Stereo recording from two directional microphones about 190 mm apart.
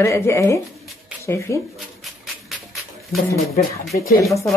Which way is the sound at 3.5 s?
50° left (ahead or behind).